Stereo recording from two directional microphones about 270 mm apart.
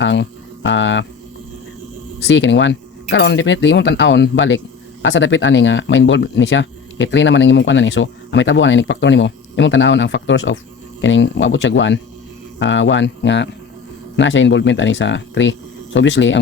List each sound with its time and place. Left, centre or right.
0.0 s speech: left
2.2 s speech: left